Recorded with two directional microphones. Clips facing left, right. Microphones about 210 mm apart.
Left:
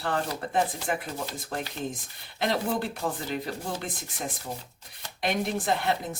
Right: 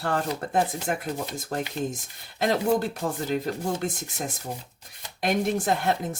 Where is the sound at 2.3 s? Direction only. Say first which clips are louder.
Right 4 dB; 45° right (ahead or behind).